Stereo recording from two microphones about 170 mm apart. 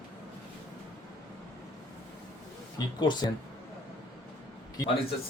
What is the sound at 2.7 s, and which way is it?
Speech, 25° left (ahead or behind).